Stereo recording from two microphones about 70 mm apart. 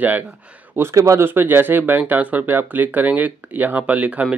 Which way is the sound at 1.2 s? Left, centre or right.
Right.